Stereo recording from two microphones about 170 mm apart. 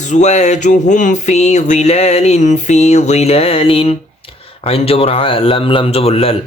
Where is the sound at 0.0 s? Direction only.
45° left (ahead or behind).